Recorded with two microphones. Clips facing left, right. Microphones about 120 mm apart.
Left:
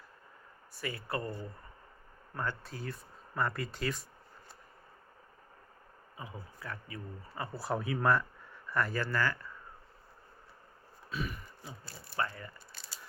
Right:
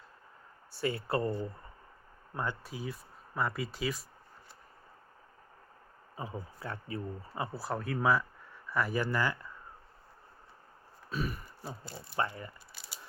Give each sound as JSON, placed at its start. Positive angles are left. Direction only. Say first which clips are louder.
{"t": 0.7, "sound": "speech", "louder": "right 6 dB", "side_deg": -30}
{"t": 2.3, "sound": "speech", "louder": "right 1 dB", "side_deg": -15}
{"t": 6.1, "sound": "speech", "louder": "right 5 dB", "side_deg": -30}
{"t": 7.5, "sound": "speech", "louder": "left 4 dB", "side_deg": 0}
{"t": 11.1, "sound": "a sound", "louder": "right 3 dB", "side_deg": -40}
{"t": 11.9, "sound": "speech", "louder": "right 2 dB", "side_deg": -20}
{"t": 12.7, "sound": "a sound", "louder": "right 1 dB", "side_deg": -5}